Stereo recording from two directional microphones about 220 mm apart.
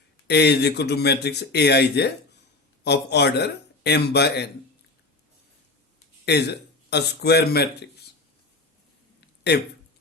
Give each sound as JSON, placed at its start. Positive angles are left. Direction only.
{"t": 0.3, "sound": "speech", "side_deg": 50}
{"t": 6.2, "sound": "speech", "side_deg": 50}
{"t": 9.5, "sound": "speech", "side_deg": 50}